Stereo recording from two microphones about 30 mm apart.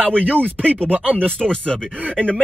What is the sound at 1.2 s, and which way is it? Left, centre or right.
Speech, left.